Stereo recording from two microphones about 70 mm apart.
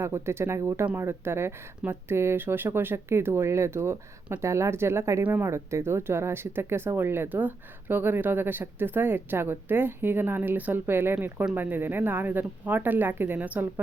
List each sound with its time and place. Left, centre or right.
0.0 s speech: right